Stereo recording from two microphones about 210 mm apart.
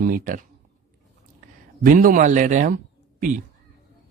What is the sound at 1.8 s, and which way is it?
A man's voice, 40° right (ahead or behind).